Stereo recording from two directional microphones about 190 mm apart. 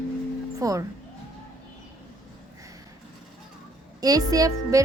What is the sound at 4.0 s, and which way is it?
Music, 20° right (ahead or behind).